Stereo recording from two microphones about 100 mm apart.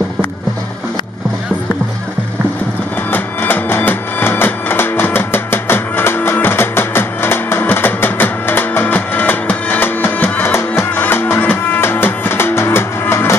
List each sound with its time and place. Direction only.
3.1 s music: 20° left (ahead or behind)